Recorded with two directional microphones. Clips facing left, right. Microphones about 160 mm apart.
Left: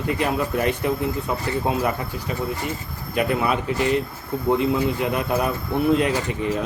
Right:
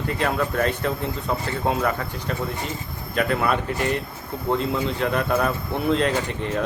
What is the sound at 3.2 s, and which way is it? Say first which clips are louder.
Speech: even; 10° left (ahead or behind).